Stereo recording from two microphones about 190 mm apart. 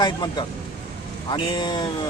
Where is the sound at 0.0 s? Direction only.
20° left (ahead or behind).